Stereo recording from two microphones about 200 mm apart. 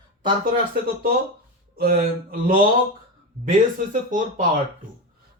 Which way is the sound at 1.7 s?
45° right (ahead or behind).